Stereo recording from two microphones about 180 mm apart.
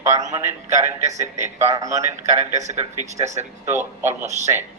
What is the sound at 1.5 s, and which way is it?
Speech, 20° right (ahead or behind).